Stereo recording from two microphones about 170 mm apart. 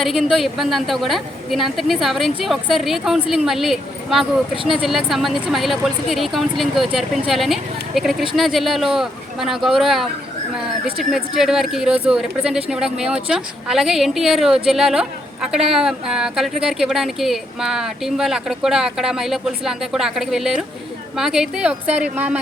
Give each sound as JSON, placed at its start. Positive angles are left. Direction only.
{"t": 0.0, "sound": "a woman's voice", "side_deg": 0}